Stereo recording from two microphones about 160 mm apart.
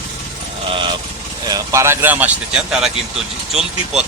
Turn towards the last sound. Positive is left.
turn(degrees=0)  # may be behind; listen again after turning